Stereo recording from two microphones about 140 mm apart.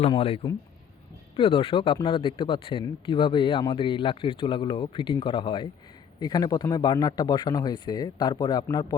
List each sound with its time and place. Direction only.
0.1 s speech: 45° left (ahead or behind)